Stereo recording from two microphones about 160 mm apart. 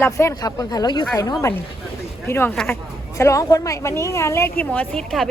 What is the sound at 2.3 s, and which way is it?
Speech, 15° left (ahead or behind).